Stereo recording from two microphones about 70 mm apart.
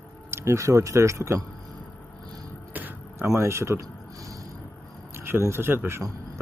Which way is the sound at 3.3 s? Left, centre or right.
Right.